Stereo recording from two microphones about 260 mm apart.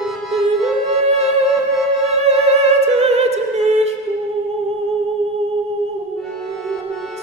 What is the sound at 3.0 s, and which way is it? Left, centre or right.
Opera, right.